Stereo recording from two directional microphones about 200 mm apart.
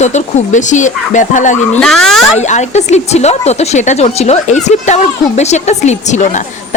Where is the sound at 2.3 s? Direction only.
35° left (ahead or behind).